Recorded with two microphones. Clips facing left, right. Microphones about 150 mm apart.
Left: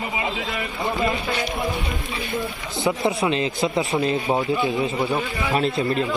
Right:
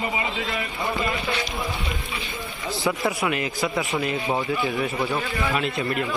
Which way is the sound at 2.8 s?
25° left (ahead or behind).